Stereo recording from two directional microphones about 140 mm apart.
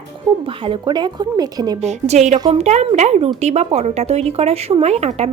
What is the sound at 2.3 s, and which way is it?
Speech, 30° right (ahead or behind).